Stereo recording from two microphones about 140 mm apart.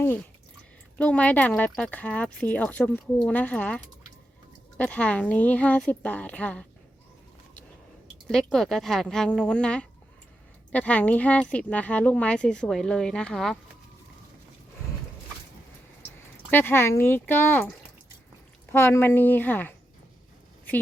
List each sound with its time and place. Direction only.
0.9 s speech: 10° left (ahead or behind)
8.3 s speech: centre (ahead or behind)
16.5 s speech: 15° left (ahead or behind)
18.7 s speech: 15° left (ahead or behind)